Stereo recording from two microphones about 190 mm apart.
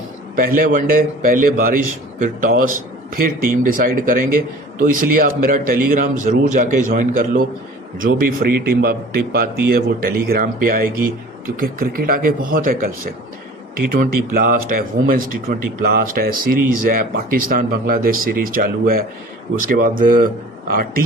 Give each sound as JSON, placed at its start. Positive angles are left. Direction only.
{"t": 0.3, "sound": "speech", "side_deg": -45}
{"t": 13.9, "sound": "speech", "side_deg": -50}